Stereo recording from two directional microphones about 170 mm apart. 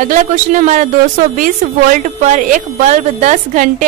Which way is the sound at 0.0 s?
45° right (ahead or behind).